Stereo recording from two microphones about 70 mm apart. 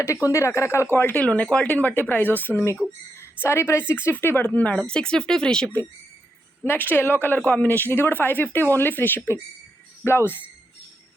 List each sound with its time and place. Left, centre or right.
0.3 s speech: left
1.1 s a woman's voice: centre
6.7 s speech: left